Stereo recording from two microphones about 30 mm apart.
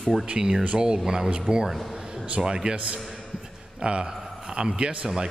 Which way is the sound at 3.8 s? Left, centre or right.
Right.